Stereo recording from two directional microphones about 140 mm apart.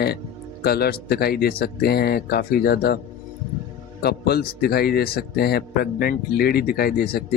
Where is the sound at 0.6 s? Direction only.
90° left.